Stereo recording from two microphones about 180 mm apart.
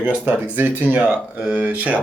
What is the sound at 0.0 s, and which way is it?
Speech, 10° right (ahead or behind).